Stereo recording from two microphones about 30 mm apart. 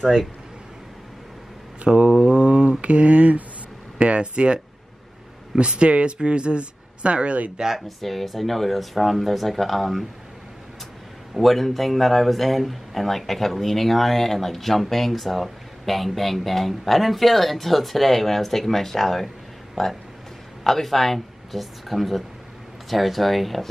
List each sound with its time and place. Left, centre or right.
1.9 s mantra: right
2.8 s speech: right
4.0 s mantra: right
5.6 s mantra: right
6.1 s speech: right
8.0 s speech: centre
11.3 s speech: centre